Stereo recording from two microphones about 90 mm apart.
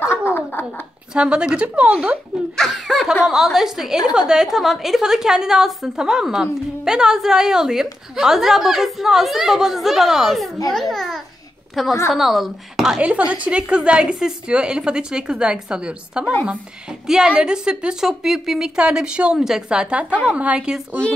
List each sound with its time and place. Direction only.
0.0 s a sound: 25° left (ahead or behind)
1.1 s a woman's voice: 10° right (ahead or behind)
2.5 s a woman's voice: 5° left (ahead or behind)
13.0 s a woman's voice: 15° right (ahead or behind)